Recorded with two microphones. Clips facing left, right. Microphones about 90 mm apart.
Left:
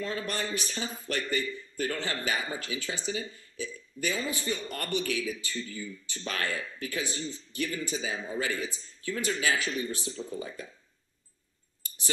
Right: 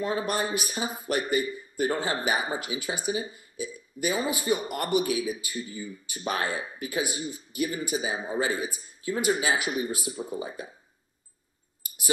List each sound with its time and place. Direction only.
0.0 s a man's voice: 20° right (ahead or behind)